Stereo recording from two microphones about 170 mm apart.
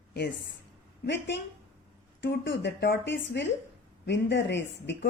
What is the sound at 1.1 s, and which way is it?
A woman's voice, 90° left.